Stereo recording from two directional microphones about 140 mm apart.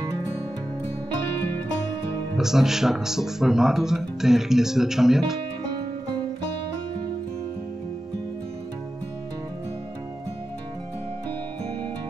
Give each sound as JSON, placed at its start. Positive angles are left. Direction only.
{"t": 2.3, "sound": "speech", "side_deg": -5}